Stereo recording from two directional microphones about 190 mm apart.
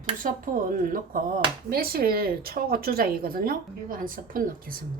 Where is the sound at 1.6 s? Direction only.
50° right (ahead or behind).